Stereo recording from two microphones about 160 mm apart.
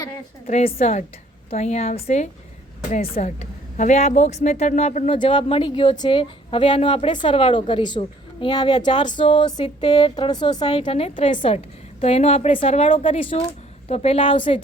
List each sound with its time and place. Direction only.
0.6 s a woman's voice: 45° left (ahead or behind)
5.1 s a woman's voice: 30° left (ahead or behind)